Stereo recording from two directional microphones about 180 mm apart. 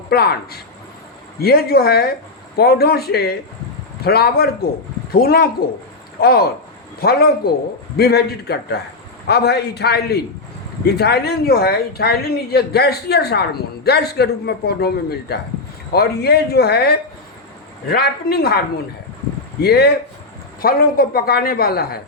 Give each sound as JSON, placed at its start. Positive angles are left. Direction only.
{"t": 0.1, "sound": "speech", "side_deg": 60}
{"t": 19.6, "sound": "speech", "side_deg": 60}